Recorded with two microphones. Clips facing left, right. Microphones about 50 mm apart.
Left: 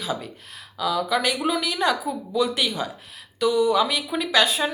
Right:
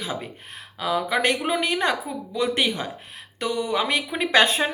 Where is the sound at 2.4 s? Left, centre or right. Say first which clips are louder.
Right 4 dB; right.